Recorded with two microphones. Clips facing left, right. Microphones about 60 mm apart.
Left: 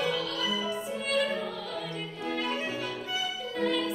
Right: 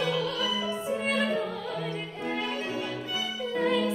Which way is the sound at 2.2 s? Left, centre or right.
Right.